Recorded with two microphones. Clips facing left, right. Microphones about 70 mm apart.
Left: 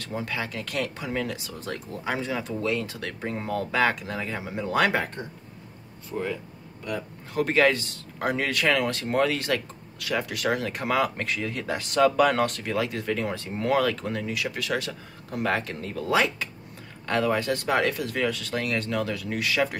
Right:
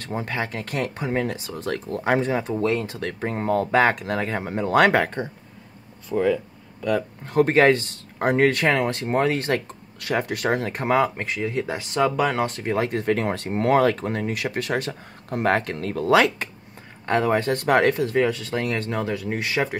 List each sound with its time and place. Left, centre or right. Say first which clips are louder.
0.0 s speech: right 4 dB; right
1.6 s speech: right 7 dB; right
7.0 s speech: right 6 dB; right
17.0 s speech: right 4 dB; right
18.0 s speech: right 6 dB; right